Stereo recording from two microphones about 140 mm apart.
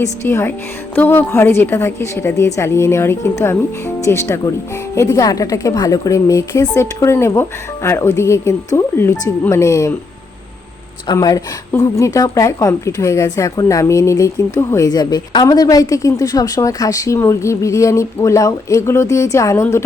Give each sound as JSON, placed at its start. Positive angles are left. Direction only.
{"t": 0.0, "sound": "speech", "side_deg": 20}
{"t": 11.1, "sound": "speech", "side_deg": 30}